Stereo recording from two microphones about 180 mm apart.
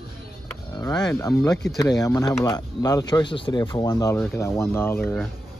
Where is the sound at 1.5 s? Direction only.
5° left (ahead or behind).